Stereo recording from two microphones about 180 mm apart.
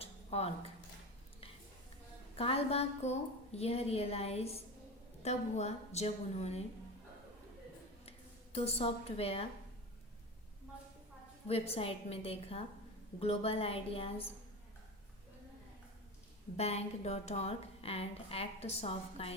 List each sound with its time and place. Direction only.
0.0 s a sound: 35° left (ahead or behind)
2.3 s a woman's voice: 35° left (ahead or behind)
8.5 s a woman's voice: 35° left (ahead or behind)
11.4 s a woman's voice: 35° left (ahead or behind)
16.6 s a woman's voice: 35° left (ahead or behind)